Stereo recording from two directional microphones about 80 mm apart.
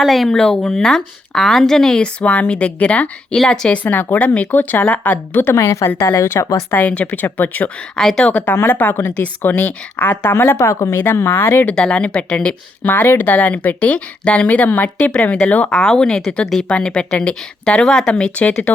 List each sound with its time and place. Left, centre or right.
0.0 s a woman's voice: centre
2.2 s speech: centre
3.8 s a woman's voice: left
6.7 s a woman's voice: centre
7.9 s a woman's voice: centre; by 11.6 s left
11.6 s speech: centre